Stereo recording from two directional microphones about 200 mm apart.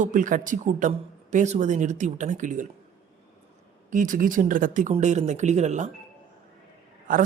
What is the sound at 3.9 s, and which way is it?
Speech, 40° right (ahead or behind).